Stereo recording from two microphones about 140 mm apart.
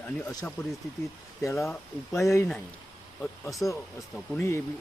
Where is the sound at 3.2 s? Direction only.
Centre (ahead or behind).